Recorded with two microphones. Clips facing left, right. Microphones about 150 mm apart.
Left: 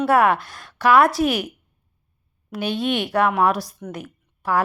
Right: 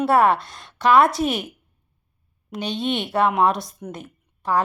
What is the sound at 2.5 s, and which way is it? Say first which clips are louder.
Speech: left 2 dB; 5° left (ahead or behind).